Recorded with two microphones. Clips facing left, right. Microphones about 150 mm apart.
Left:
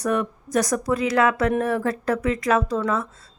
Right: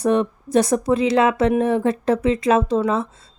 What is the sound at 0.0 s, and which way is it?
Speech, 25° right (ahead or behind).